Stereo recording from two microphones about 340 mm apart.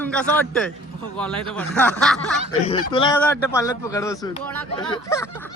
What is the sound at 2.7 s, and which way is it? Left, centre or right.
Speech, centre.